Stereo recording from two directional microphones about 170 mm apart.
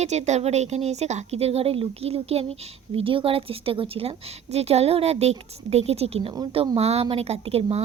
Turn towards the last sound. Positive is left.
turn(degrees=-35)  # may be behind; listen again after turning